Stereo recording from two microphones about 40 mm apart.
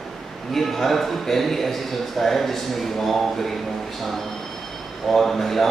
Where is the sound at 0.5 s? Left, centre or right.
Centre.